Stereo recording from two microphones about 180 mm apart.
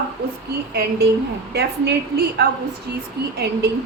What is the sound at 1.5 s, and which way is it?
Speech, 65° right (ahead or behind).